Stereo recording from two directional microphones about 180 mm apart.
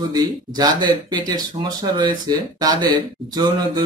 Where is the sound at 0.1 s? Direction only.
20° right (ahead or behind).